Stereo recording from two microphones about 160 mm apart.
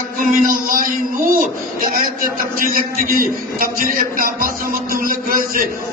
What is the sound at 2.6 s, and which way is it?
A man's voice, 60° right (ahead or behind).